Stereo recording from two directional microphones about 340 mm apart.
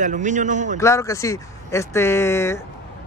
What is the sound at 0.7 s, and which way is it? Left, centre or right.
A man's voice, centre.